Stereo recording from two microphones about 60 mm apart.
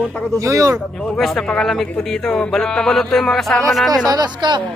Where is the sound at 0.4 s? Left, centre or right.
Right.